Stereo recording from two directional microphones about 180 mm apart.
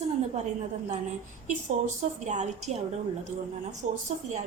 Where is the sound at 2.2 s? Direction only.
40° right (ahead or behind).